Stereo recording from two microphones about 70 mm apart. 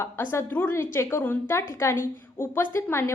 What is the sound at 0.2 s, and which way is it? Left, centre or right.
A woman's voice, left.